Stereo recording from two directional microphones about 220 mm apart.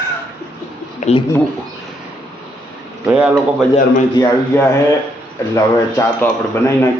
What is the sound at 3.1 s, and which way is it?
Speech, 5° right (ahead or behind).